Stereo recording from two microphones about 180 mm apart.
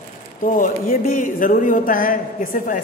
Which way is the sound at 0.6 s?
50° left (ahead or behind).